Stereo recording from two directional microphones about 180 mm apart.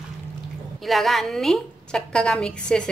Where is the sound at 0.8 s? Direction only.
Centre (ahead or behind).